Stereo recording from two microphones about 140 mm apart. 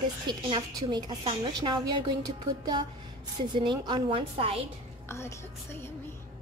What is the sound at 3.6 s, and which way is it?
A woman's voice, 35° right (ahead or behind).